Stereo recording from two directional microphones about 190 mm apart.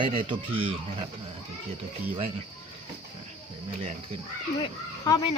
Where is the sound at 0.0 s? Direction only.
25° right (ahead or behind).